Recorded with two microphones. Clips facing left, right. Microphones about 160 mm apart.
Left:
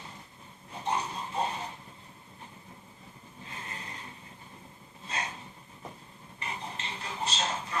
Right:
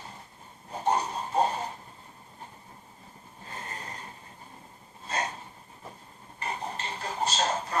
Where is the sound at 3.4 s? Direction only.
40° right (ahead or behind).